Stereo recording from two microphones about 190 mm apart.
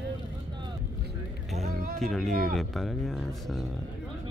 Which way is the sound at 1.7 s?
50° right (ahead or behind).